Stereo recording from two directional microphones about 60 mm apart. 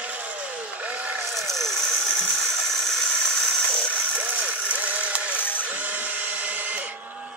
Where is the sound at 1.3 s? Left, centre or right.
Centre.